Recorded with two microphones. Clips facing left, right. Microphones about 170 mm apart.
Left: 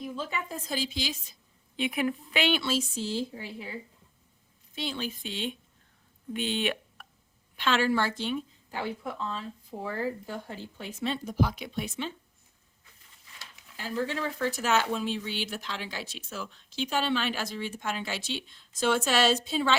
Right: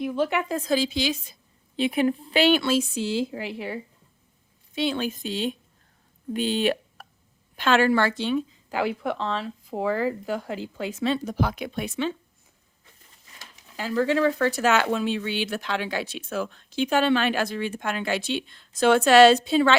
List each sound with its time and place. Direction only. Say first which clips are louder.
0.0 s a woman's voice: right 10 dB; 70° right (ahead or behind)
1.7 s a woman's voice: right 6 dB; 30° right (ahead or behind)
2.6 s a woman's voice: right 6 dB; 55° right (ahead or behind); by 7.1 s 40° right (ahead or behind)
7.5 s speech: right 6 dB; 50° right (ahead or behind); by 12.1 s 80° right
13.7 s speech: right 9 dB; 90° right; by 19.7 s 65° right (ahead or behind)